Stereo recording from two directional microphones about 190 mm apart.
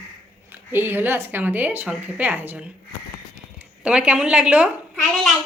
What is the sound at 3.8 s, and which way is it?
Speech, 5° right (ahead or behind).